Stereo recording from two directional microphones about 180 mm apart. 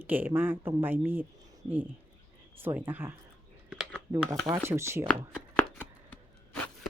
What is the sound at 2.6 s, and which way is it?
Speech, 10° right (ahead or behind).